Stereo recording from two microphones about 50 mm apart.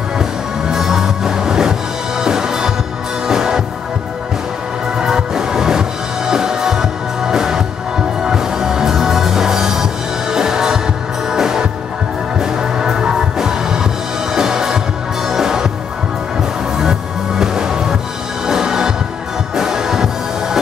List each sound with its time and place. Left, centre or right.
0.2 s music: centre
4.9 s music: centre
17.4 s music: centre